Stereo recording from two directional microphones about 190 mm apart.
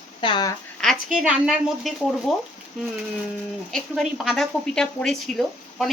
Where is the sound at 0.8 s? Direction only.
5° right (ahead or behind).